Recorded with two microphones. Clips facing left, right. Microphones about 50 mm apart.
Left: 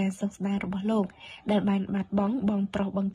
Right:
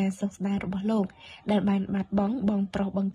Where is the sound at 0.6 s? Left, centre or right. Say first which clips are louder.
Even; left.